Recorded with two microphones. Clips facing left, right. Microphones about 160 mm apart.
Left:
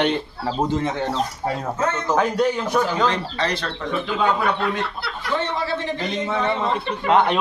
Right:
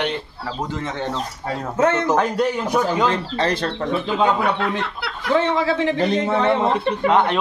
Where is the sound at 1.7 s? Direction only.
70° right (ahead or behind).